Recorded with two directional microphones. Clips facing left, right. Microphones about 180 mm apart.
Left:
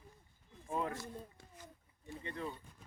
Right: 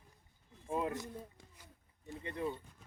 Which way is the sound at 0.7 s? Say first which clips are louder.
Right 2 dB; 15° right (ahead or behind).